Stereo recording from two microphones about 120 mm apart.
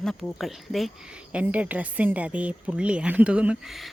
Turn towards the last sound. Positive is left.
turn(degrees=0)  # may be behind; listen again after turning